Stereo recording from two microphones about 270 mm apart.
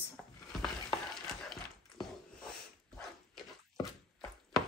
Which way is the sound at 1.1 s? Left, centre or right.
Centre.